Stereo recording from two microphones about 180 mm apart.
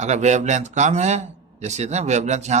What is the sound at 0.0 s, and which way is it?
A man's voice, 40° right (ahead or behind).